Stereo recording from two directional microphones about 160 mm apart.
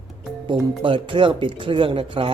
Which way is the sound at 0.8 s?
30° right (ahead or behind).